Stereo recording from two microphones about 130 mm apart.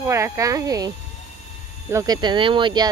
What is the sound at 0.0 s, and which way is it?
Speech, 25° right (ahead or behind).